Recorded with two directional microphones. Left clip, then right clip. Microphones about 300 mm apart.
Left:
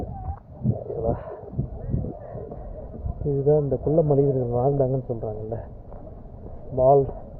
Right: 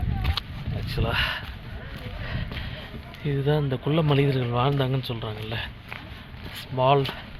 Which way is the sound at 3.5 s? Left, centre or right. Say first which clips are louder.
Left 6 dB; centre.